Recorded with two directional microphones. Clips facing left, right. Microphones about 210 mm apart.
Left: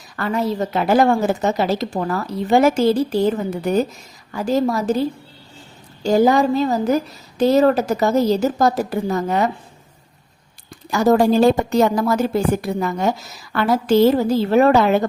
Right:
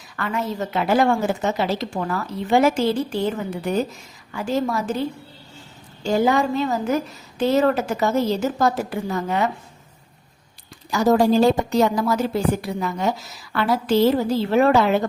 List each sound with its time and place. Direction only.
0.2 s a woman's voice: 35° left (ahead or behind)
10.9 s a woman's voice: 55° left (ahead or behind)